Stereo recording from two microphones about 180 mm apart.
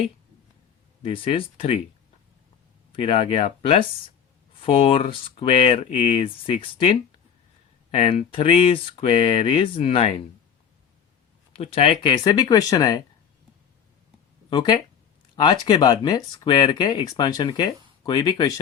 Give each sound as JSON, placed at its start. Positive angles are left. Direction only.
{"t": 1.0, "sound": "speech", "side_deg": 30}
{"t": 2.9, "sound": "speech", "side_deg": 30}
{"t": 11.5, "sound": "speech", "side_deg": 30}
{"t": 14.5, "sound": "speech", "side_deg": 25}